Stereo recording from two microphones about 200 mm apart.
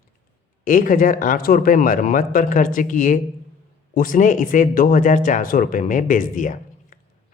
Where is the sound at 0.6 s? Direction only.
45° left (ahead or behind).